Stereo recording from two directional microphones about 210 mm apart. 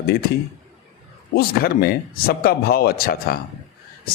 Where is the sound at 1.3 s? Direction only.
45° left (ahead or behind).